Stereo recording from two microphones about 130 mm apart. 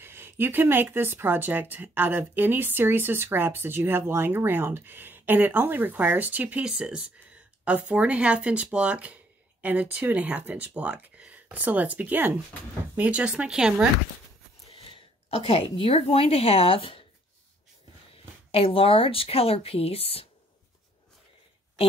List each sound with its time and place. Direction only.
0.0 s speech: 15° right (ahead or behind)
14.7 s speech: 50° left (ahead or behind)
18.5 s speech: 45° left (ahead or behind)